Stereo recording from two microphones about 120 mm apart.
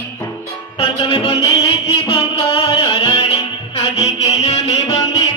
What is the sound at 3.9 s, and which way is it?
Music, 60° left (ahead or behind).